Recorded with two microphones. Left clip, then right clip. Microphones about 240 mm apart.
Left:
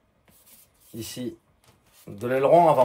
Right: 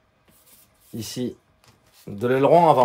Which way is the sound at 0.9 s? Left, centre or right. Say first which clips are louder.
Right 4 dB; right.